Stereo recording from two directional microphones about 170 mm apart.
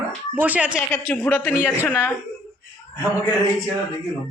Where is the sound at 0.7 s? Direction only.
15° left (ahead or behind).